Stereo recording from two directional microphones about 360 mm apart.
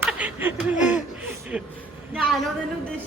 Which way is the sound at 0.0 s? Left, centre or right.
Centre.